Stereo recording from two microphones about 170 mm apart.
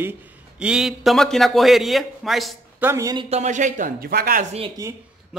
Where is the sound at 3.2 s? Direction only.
40° right (ahead or behind); by 4.5 s 60° right (ahead or behind).